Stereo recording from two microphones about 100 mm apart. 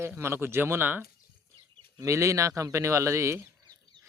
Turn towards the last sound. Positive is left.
turn(degrees=-30)  # may be behind; listen again after turning